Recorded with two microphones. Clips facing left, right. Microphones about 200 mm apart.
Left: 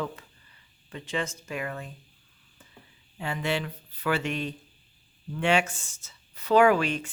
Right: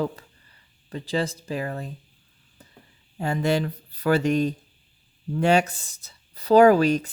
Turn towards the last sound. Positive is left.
turn(degrees=-40)  # may be behind; listen again after turning